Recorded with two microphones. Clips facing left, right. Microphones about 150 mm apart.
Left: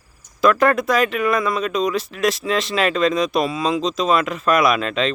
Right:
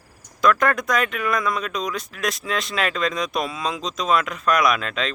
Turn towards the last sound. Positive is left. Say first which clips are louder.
# left 4 dB
turn(degrees=0)  # may be behind; listen again after turning